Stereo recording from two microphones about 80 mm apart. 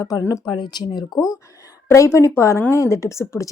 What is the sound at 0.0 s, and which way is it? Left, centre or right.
Speech, left.